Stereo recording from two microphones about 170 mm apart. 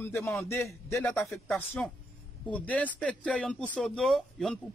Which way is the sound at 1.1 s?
Centre (ahead or behind).